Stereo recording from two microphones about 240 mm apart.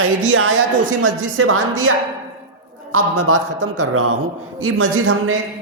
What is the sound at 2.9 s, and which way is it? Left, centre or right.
Speech, right.